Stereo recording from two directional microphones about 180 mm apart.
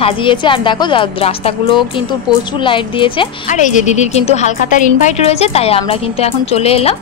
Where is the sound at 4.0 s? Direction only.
40° left (ahead or behind).